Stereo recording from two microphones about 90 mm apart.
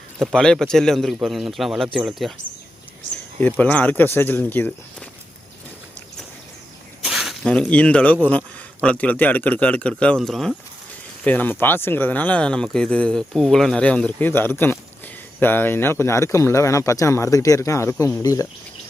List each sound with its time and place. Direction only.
0.2 s speech: 5° left (ahead or behind)
3.4 s speech: 15° left (ahead or behind)
7.0 s snake: 5° right (ahead or behind)
7.4 s speech: 10° left (ahead or behind)
11.2 s speech: 20° left (ahead or behind)
14.2 s speech: 25° left (ahead or behind); by 18.4 s 40° left (ahead or behind)